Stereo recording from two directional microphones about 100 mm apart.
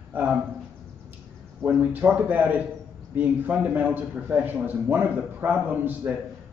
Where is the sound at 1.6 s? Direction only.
15° right (ahead or behind).